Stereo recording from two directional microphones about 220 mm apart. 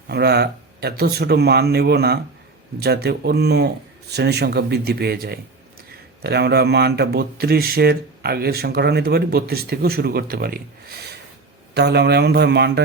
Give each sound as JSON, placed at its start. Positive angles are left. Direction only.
{"t": 0.1, "sound": "speech", "side_deg": -50}